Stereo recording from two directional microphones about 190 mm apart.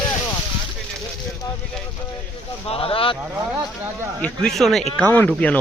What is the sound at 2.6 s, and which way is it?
Speech, 30° left (ahead or behind).